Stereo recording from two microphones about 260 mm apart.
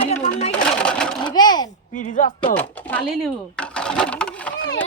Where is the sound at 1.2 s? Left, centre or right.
Centre.